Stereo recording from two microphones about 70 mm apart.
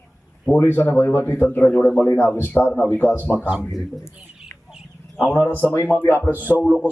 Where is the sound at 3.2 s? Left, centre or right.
Centre.